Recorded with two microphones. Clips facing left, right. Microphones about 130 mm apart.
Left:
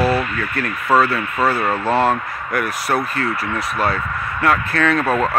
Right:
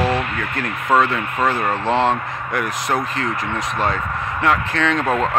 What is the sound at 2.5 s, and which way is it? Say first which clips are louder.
Speech: left 1 dB; 20° right (ahead or behind).